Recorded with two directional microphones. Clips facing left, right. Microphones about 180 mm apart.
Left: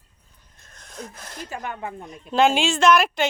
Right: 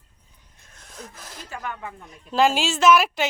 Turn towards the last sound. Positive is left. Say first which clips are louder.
# even
turn(degrees=-5)  # may be behind; listen again after turning